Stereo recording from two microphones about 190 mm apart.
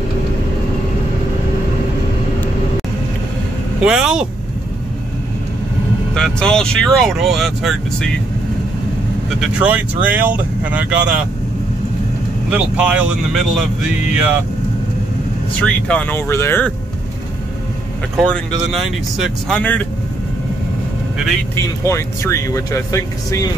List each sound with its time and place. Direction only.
3.8 s speech: 5° right (ahead or behind)
6.1 s speech: 5° left (ahead or behind)
9.4 s speech: 5° right (ahead or behind)
12.4 s speech: 5° right (ahead or behind)
15.6 s speech: 5° left (ahead or behind)
18.1 s speech: centre (ahead or behind)
21.8 s speech: 15° left (ahead or behind)